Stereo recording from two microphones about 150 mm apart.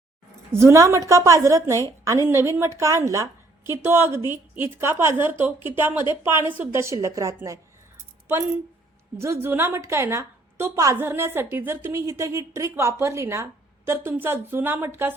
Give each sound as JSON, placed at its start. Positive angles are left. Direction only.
{"t": 0.5, "sound": "a woman's voice", "side_deg": -15}
{"t": 9.1, "sound": "a woman's voice", "side_deg": -15}